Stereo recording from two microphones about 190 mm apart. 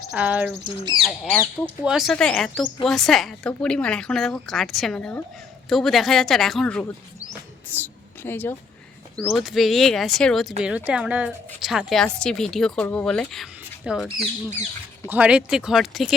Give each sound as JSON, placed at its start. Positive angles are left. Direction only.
{"t": 0.1, "sound": "speech", "side_deg": -5}
{"t": 9.1, "sound": "speech", "side_deg": 0}
{"t": 14.2, "sound": "speech", "side_deg": -40}
{"t": 15.1, "sound": "speech", "side_deg": -5}